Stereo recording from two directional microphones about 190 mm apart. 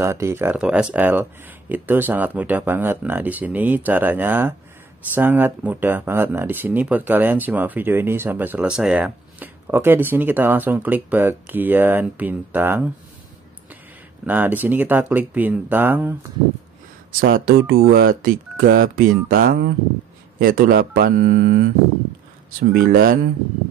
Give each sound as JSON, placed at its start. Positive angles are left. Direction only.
{"t": 0.0, "sound": "speech", "side_deg": -15}
{"t": 14.2, "sound": "speech", "side_deg": -10}
{"t": 17.2, "sound": "speech", "side_deg": -50}